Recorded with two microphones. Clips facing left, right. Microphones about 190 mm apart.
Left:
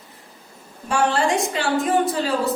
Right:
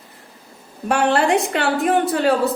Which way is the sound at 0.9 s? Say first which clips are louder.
Right 3 dB; 60° right (ahead or behind).